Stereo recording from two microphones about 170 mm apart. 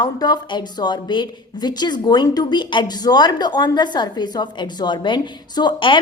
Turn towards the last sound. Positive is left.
turn(degrees=30)  # may be behind; listen again after turning